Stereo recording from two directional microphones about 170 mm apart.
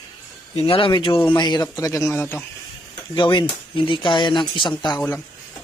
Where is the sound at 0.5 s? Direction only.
30° left (ahead or behind); by 2.4 s 10° left (ahead or behind).